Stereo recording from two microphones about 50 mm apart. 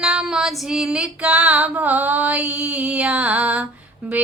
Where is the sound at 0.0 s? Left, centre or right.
Centre.